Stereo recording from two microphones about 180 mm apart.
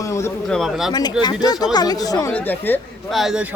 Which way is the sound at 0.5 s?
Centre (ahead or behind).